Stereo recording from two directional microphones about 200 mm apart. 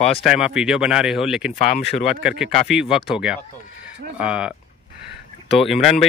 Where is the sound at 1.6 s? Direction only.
35° left (ahead or behind).